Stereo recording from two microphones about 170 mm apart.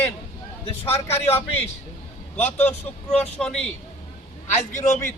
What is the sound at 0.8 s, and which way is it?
Speech, 15° left (ahead or behind).